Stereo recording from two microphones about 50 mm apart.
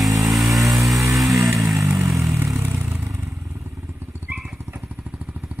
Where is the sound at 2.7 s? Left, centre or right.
Right.